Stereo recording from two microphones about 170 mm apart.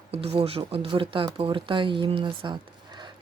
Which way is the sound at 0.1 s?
35° right (ahead or behind).